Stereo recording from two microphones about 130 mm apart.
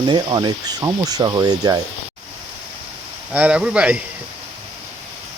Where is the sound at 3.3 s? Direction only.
10° right (ahead or behind).